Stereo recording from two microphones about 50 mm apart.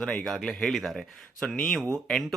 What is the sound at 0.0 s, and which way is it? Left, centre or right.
Speech, centre.